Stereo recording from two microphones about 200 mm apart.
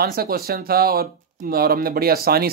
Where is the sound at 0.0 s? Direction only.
50° right (ahead or behind).